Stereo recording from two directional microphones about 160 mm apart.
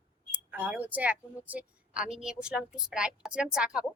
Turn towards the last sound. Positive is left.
turn(degrees=-5)  # may be behind; listen again after turning